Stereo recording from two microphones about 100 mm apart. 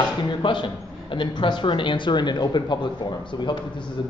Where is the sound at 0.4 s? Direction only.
50° left (ahead or behind).